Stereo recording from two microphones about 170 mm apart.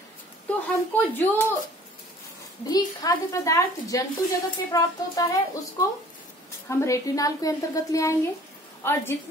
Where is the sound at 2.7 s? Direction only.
20° left (ahead or behind).